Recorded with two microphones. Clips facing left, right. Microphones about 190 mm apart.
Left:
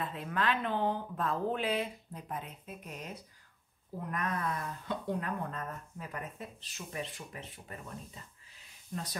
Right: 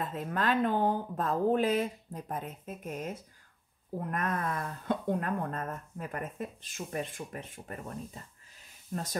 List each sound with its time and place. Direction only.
0.0 s speech: 45° right (ahead or behind)